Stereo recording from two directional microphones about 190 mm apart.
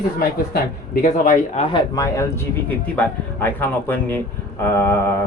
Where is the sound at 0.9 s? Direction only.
45° left (ahead or behind).